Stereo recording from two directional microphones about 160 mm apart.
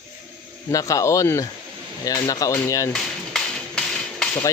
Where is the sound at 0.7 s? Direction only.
20° left (ahead or behind).